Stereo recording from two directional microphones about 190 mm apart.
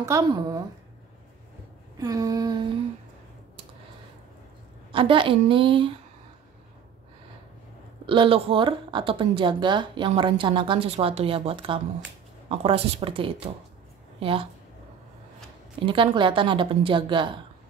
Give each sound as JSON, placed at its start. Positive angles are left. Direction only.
{"t": 0.0, "sound": "speech", "side_deg": -15}
{"t": 2.0, "sound": "speech", "side_deg": -20}
{"t": 4.9, "sound": "speech", "side_deg": -25}
{"t": 8.1, "sound": "speech", "side_deg": -25}
{"t": 15.8, "sound": "speech", "side_deg": -25}